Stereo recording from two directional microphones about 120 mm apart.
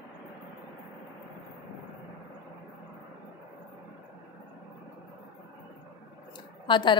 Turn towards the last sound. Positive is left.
turn(degrees=40)  # may be behind; listen again after turning